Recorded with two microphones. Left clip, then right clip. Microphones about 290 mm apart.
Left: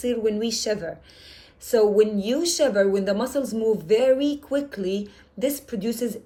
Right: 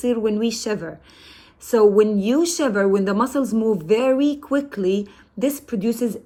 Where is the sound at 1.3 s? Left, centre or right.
Right.